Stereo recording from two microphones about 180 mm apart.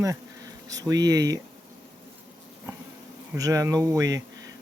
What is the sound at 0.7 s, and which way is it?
Speech, 20° right (ahead or behind).